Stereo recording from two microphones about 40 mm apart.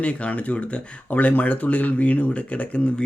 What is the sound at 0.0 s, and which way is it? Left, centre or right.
Speech, left.